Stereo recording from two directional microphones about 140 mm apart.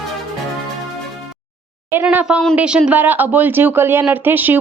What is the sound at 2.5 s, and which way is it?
Speech, 5° right (ahead or behind).